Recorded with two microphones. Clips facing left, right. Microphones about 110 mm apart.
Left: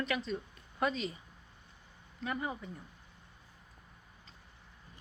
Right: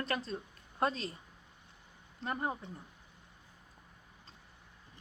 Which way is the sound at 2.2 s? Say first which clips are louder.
Right 1 dB; 45° right (ahead or behind).